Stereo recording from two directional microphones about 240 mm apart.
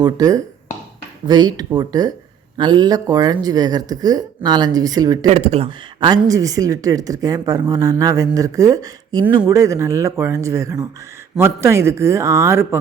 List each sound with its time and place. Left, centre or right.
0.0 s a woman's voice: centre
5.2 s a woman's voice: right; by 12.8 s centre